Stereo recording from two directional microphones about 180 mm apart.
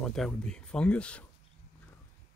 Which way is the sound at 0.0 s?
5° left (ahead or behind).